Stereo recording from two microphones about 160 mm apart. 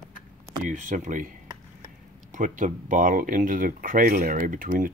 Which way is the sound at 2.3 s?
55° right (ahead or behind).